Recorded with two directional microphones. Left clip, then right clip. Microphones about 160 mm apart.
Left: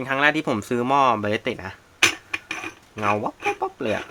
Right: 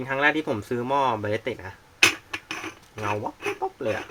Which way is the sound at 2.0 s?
Centre (ahead or behind).